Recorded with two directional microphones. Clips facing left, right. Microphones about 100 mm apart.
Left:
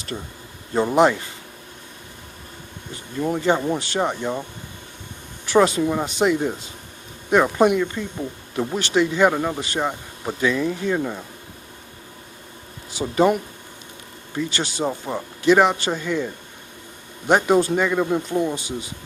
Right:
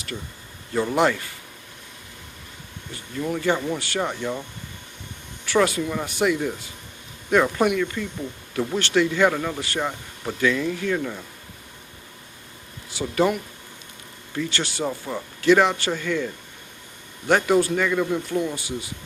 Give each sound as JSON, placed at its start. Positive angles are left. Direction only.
{"t": 0.1, "sound": "speech", "side_deg": 45}
{"t": 0.7, "sound": "speech", "side_deg": 25}
{"t": 2.9, "sound": "speech", "side_deg": 20}
{"t": 5.5, "sound": "speech", "side_deg": 20}
{"t": 13.0, "sound": "speech", "side_deg": 25}